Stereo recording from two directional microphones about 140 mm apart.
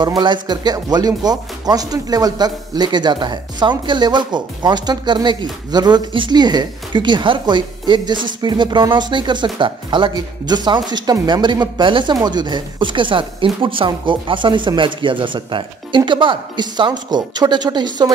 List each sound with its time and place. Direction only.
0.2 s speech: 30° right (ahead or behind)